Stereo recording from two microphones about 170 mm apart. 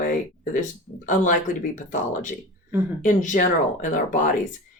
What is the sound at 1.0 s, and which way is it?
Speech, 50° left (ahead or behind).